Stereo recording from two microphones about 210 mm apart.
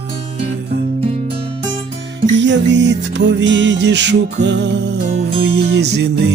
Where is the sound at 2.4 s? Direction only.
60° right (ahead or behind).